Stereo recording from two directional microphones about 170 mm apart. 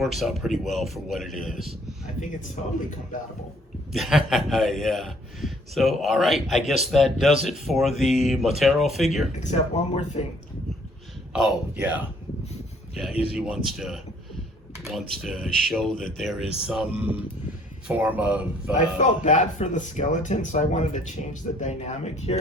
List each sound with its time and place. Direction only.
0.0 s a man's voice: centre (ahead or behind)
2.6 s speech: 45° left (ahead or behind)
3.9 s a man's voice: centre (ahead or behind)
9.4 s speech: 45° left (ahead or behind)
11.3 s speech: 5° right (ahead or behind)
12.9 s a sound: centre (ahead or behind)
13.3 s a man's voice: 5° right (ahead or behind)
18.7 s speech: 45° left (ahead or behind)